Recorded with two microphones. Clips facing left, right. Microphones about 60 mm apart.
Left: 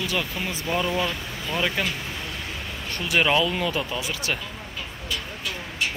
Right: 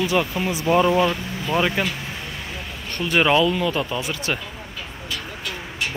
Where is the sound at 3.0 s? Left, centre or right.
Centre.